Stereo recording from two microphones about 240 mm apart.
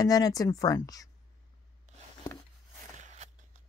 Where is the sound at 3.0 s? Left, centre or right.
Right.